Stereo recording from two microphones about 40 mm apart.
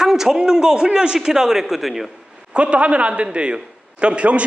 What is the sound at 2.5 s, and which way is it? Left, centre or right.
A man's voice, right.